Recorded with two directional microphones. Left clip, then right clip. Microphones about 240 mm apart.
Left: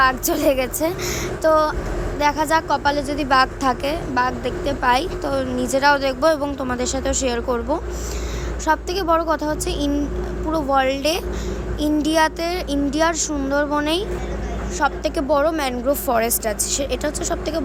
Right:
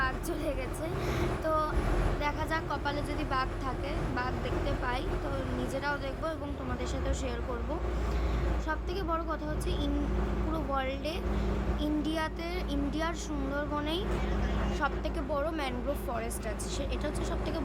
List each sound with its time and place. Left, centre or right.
0.0 s a woman's voice: left
8.6 s a woman's voice: left